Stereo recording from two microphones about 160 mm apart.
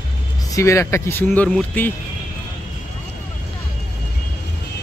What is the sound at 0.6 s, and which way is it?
Speech, 20° left (ahead or behind).